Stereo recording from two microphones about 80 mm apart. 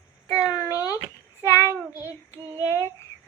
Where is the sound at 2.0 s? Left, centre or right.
Left.